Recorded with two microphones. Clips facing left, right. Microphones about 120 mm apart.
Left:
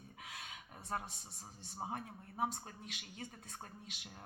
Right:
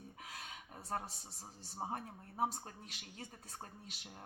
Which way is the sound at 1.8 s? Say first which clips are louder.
Right 1 dB; 35° right (ahead or behind).